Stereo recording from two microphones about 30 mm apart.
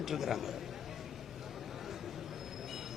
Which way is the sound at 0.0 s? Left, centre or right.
Centre.